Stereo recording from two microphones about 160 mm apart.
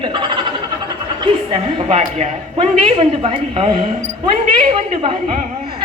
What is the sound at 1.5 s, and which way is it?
A woman's voice, 40° right (ahead or behind).